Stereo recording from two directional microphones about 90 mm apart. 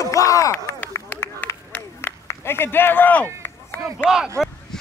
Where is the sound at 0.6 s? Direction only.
30° left (ahead or behind).